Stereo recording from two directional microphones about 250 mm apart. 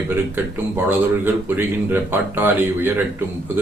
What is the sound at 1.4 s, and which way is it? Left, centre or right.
Speech, centre.